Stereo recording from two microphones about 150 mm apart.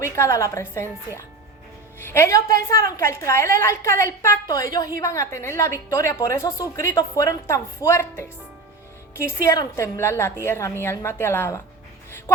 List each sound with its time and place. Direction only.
0.0 s a woman's voice: 20° left (ahead or behind)